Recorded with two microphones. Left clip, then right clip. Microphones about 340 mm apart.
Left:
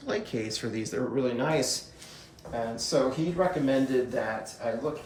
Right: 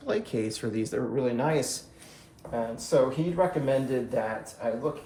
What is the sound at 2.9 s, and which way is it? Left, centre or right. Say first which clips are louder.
Speech: right 3 dB; centre.